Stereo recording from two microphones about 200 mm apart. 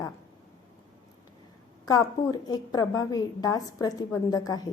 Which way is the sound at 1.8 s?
20° left (ahead or behind).